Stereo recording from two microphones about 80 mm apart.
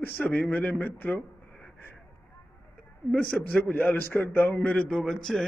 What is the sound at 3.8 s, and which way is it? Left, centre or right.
A man's voice, left.